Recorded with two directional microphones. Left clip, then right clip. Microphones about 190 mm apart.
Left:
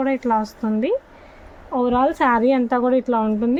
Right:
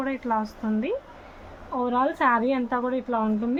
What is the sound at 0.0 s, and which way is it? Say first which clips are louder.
A woman's voice: left 7 dB; 50° left (ahead or behind).